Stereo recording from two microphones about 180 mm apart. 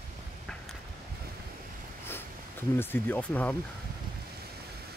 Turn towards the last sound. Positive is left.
turn(degrees=10)  # may be behind; listen again after turning